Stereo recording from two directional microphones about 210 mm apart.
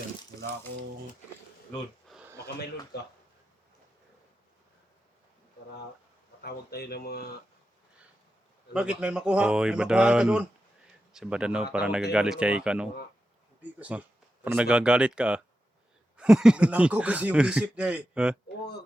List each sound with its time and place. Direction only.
1.7 s a sound: centre (ahead or behind)
6.4 s speech: 50° left (ahead or behind)
8.7 s speech: 5° right (ahead or behind)